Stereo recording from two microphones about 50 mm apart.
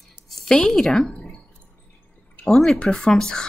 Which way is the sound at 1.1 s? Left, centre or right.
Left.